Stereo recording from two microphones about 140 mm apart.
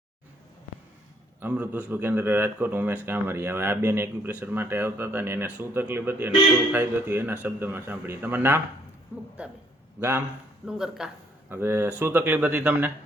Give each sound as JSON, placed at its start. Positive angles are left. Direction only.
{"t": 1.4, "sound": "a man's voice", "side_deg": -15}
{"t": 10.7, "sound": "speech", "side_deg": -5}
{"t": 11.4, "sound": "a man's voice", "side_deg": -15}